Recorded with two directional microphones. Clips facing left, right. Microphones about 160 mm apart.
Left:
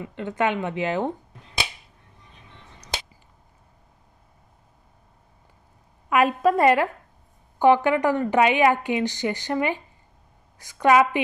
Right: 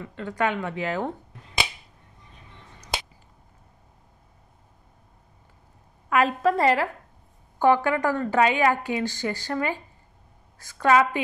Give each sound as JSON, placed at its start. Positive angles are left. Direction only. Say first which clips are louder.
{"t": 0.0, "sound": "a woman's voice", "louder": "left 2 dB", "side_deg": 20}
{"t": 6.0, "sound": "a woman's voice", "louder": "left 2 dB", "side_deg": 15}